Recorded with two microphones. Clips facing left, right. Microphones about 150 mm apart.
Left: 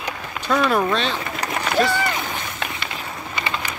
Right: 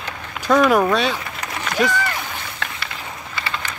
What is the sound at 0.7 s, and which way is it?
Speech, 10° right (ahead or behind).